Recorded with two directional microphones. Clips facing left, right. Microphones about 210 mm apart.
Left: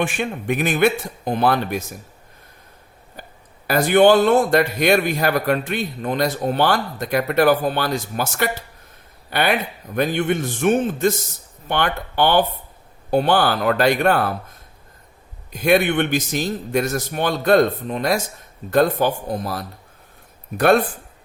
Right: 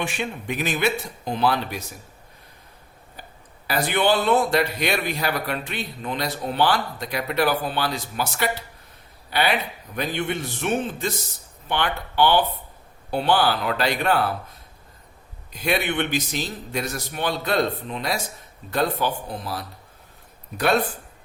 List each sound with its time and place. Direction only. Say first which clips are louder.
0.0 s a man's voice: left 5 dB; 50° left (ahead or behind)
3.2 s a sound: left 4 dB; 45° left (ahead or behind)
3.7 s a man's voice: left 8 dB; 45° left (ahead or behind)
15.5 s a man's voice: left 7 dB; 50° left (ahead or behind)